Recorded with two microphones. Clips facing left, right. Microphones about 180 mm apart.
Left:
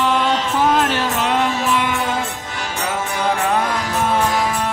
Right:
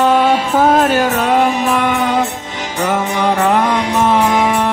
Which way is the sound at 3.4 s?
70° right (ahead or behind).